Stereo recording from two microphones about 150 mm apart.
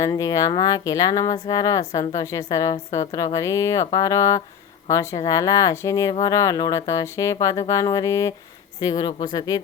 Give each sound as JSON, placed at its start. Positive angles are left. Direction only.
{"t": 0.0, "sound": "speech", "side_deg": 20}